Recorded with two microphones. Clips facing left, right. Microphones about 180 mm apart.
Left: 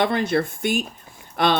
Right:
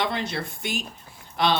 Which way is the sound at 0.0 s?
50° left (ahead or behind).